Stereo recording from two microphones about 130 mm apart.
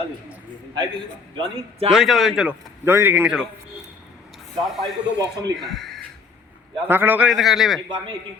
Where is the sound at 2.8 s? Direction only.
20° right (ahead or behind).